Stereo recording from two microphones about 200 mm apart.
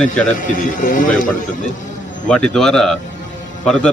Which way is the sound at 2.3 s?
5° left (ahead or behind).